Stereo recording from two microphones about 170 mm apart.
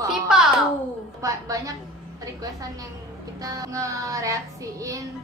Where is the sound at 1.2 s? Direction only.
20° right (ahead or behind).